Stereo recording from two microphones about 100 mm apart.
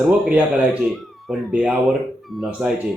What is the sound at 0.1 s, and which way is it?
Speech, 15° right (ahead or behind).